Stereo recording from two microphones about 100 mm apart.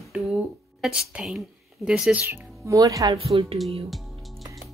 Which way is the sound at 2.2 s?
30° right (ahead or behind).